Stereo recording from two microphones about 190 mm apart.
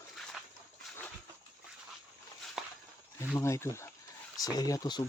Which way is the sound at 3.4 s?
15° left (ahead or behind).